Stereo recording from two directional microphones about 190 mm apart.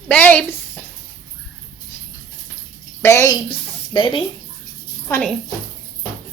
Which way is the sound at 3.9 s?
25° left (ahead or behind).